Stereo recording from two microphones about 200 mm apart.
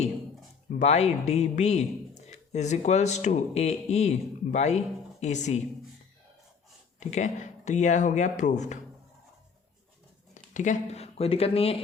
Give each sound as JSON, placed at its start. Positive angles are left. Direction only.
{"t": 0.8, "sound": "a man's voice", "side_deg": 35}
{"t": 7.0, "sound": "a man's voice", "side_deg": 35}
{"t": 10.3, "sound": "speech", "side_deg": 35}